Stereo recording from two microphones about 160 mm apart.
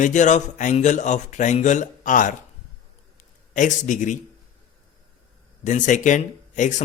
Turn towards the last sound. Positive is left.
turn(degrees=50)  # may be behind; listen again after turning